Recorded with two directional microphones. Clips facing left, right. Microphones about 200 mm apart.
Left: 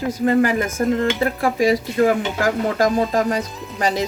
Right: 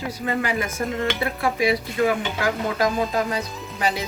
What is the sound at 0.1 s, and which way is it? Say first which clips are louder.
Speech: left 10 dB; 45° left (ahead or behind).